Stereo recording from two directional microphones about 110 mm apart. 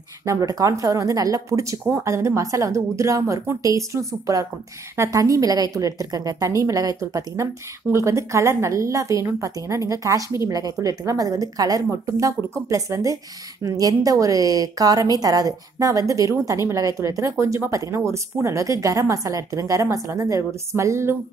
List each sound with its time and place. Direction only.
0.2 s a woman's voice: 30° right (ahead or behind)